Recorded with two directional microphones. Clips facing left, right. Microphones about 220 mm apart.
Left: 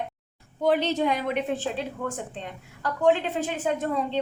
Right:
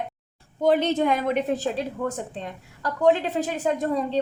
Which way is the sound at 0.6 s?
50° right (ahead or behind).